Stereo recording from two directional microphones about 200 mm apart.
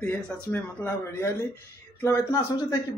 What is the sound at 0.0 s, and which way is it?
Speech, 5° left (ahead or behind).